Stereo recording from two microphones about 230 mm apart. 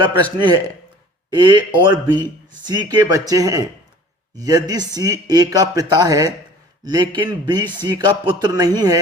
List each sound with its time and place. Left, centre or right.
0.0 s speech: centre
1.3 s speech: centre